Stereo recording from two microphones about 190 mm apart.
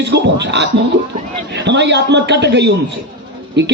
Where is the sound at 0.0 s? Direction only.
65° right (ahead or behind).